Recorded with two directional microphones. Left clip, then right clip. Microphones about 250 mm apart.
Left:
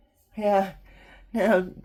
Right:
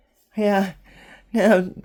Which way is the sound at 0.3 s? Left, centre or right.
Right.